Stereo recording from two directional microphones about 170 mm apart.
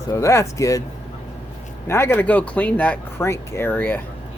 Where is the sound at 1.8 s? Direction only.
15° left (ahead or behind).